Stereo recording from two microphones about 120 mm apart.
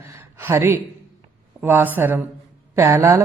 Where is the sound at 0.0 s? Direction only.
25° right (ahead or behind).